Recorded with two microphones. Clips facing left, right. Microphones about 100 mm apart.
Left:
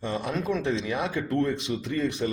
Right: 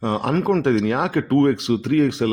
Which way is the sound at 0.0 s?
80° right.